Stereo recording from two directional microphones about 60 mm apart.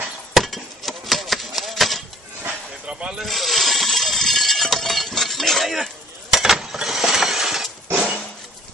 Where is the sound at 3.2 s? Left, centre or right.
Centre.